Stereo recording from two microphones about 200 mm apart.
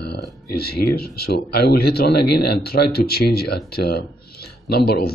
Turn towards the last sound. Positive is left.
turn(degrees=50)  # may be behind; listen again after turning